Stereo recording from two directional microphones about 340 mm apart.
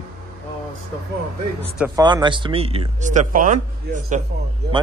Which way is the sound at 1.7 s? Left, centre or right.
Centre.